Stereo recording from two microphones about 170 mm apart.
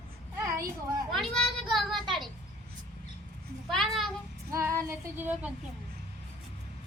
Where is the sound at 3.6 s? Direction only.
Centre (ahead or behind).